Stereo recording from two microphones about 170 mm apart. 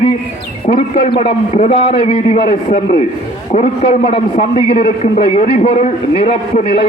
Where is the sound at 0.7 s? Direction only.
45° left (ahead or behind).